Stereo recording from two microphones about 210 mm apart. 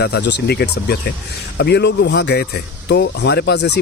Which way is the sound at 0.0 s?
55° left (ahead or behind).